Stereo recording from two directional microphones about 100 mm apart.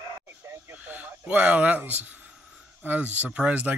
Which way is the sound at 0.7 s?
15° right (ahead or behind).